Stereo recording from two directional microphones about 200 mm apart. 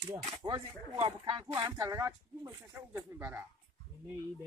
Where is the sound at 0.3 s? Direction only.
15° right (ahead or behind).